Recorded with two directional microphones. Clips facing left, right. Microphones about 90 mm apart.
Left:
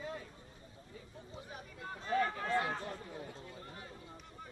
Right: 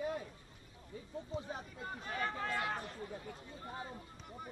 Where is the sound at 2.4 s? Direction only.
25° left (ahead or behind).